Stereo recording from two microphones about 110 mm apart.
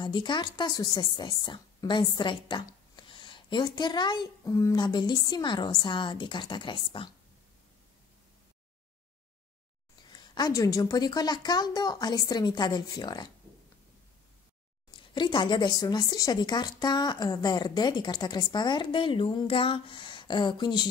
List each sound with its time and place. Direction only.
0.0 s a woman's voice: 45° left (ahead or behind)
2.4 s a sound: 45° left (ahead or behind)
4.5 s speech: 30° left (ahead or behind)
4.7 s a woman's voice: 45° left (ahead or behind)
10.1 s a woman's voice: 40° left (ahead or behind)
15.0 s a woman's voice: 45° left (ahead or behind)